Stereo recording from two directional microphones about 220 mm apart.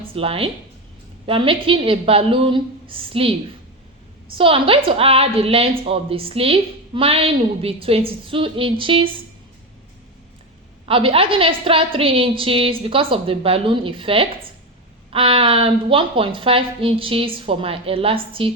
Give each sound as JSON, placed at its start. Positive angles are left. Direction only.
{"t": 0.0, "sound": "a woman's voice", "side_deg": -25}
{"t": 4.4, "sound": "a woman's voice", "side_deg": -25}
{"t": 10.8, "sound": "a woman's voice", "side_deg": -25}